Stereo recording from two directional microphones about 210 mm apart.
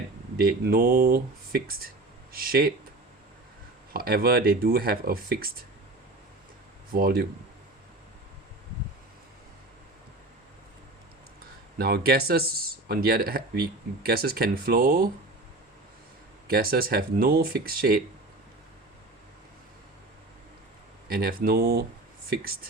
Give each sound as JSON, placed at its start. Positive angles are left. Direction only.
{"t": 0.3, "sound": "speech", "side_deg": -45}
{"t": 3.9, "sound": "speech", "side_deg": -45}
{"t": 6.9, "sound": "speech", "side_deg": -45}
{"t": 11.8, "sound": "speech", "side_deg": -45}
{"t": 16.5, "sound": "speech", "side_deg": -45}
{"t": 21.1, "sound": "speech", "side_deg": -45}